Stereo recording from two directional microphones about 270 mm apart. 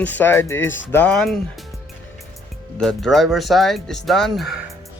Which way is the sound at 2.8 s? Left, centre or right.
Centre.